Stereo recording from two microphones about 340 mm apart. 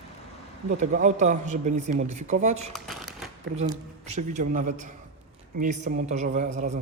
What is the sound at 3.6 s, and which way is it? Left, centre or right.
Speech, centre.